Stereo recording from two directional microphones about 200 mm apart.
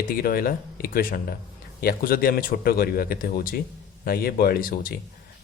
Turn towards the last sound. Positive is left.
turn(degrees=45)  # may be behind; listen again after turning